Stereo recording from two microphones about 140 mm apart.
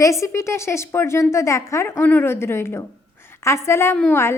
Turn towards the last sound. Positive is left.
turn(degrees=15)  # may be behind; listen again after turning